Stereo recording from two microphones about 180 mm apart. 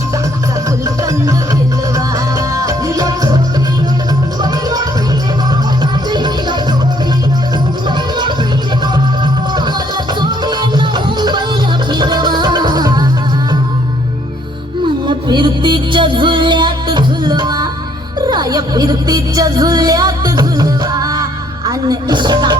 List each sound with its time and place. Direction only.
1.0 s music: 20° right (ahead or behind)
2.6 s music: 20° right (ahead or behind)
5.8 s music: 25° right (ahead or behind)
10.2 s music: 25° right (ahead or behind)
15.0 s music: 25° right (ahead or behind)